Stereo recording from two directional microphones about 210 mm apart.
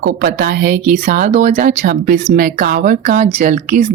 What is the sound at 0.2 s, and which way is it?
A woman's voice, 45° right (ahead or behind).